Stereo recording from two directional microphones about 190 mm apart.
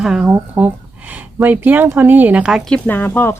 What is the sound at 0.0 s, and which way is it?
Speech, 5° right (ahead or behind).